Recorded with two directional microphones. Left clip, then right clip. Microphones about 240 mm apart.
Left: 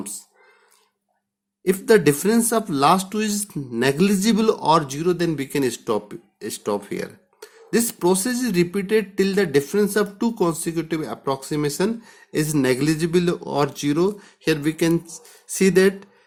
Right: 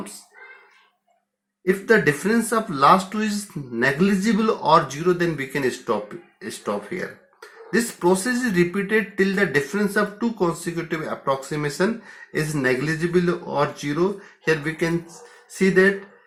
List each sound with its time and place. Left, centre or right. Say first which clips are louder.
1.6 s speech: left 2 dB; left